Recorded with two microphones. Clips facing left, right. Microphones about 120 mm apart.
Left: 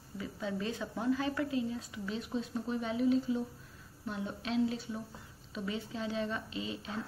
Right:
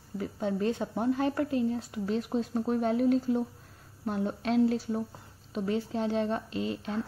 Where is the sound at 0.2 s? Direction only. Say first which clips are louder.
Right 7 dB; 50° right (ahead or behind).